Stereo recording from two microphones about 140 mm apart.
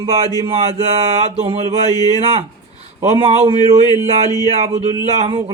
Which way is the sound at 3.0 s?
45° right (ahead or behind).